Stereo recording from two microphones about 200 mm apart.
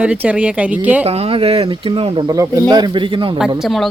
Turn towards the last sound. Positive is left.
turn(degrees=0)  # may be behind; listen again after turning